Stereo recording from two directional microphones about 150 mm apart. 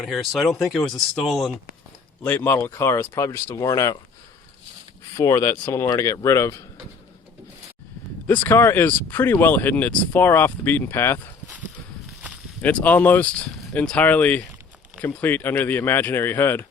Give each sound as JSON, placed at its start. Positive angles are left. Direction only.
{"t": 0.0, "sound": "speech", "side_deg": 0}
{"t": 2.2, "sound": "speech", "side_deg": 15}
{"t": 5.1, "sound": "speech", "side_deg": 20}
{"t": 8.4, "sound": "speech", "side_deg": 15}
{"t": 12.6, "sound": "speech", "side_deg": 10}